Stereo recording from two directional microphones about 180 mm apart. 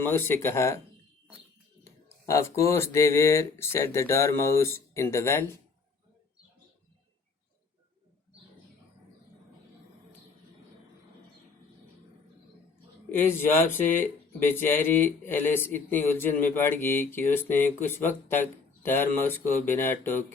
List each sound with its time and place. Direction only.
0.0 s speech: 10° left (ahead or behind)
2.2 s speech: 15° left (ahead or behind)
13.1 s speech: 10° left (ahead or behind)